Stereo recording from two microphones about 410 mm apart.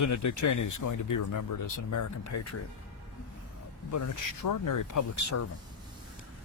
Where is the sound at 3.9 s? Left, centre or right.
Left.